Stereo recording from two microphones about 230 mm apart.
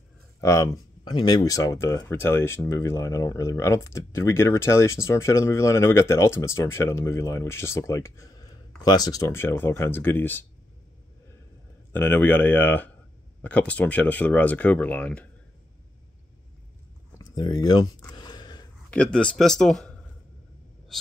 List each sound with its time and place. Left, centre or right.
0.4 s speech: centre
11.9 s speech: centre
17.2 s a sound: centre
18.9 s speech: centre